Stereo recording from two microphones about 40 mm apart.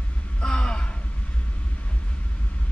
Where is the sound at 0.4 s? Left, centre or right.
Left.